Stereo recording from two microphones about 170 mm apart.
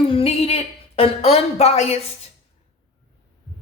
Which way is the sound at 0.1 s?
35° left (ahead or behind).